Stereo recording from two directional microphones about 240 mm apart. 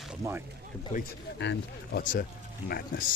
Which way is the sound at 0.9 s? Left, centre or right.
Left.